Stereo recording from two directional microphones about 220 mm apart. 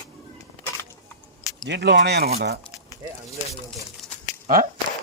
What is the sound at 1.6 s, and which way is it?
Speech, 50° right (ahead or behind).